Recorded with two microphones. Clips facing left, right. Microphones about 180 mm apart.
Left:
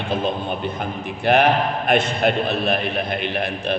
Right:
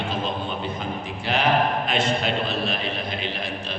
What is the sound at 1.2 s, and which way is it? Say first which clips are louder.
A man's voice: left 5 dB; 60° left (ahead or behind).